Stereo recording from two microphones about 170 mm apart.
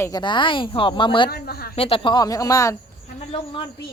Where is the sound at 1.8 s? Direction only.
35° left (ahead or behind).